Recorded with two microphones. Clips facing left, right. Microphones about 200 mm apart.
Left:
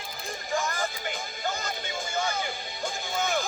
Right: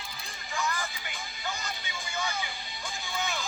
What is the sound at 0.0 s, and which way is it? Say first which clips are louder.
Music: left 7 dB; 50° left (ahead or behind).